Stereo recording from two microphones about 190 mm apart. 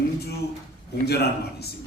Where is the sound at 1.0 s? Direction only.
60° left (ahead or behind).